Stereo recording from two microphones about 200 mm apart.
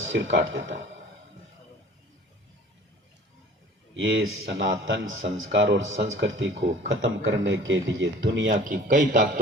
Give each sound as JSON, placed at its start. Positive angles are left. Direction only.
{"t": 0.0, "sound": "speech", "side_deg": -70}
{"t": 3.9, "sound": "speech", "side_deg": -70}
{"t": 8.6, "sound": "a man's voice", "side_deg": -40}